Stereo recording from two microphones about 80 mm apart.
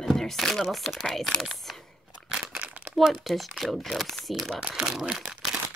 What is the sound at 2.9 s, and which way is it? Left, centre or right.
A woman's voice, centre.